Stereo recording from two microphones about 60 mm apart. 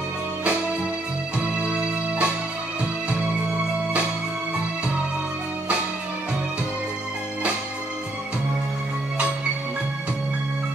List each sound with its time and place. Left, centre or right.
0.4 s music: right